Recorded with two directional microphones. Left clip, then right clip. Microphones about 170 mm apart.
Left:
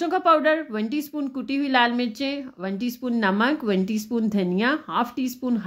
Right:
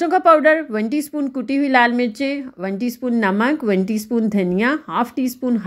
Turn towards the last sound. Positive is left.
turn(degrees=-20)  # may be behind; listen again after turning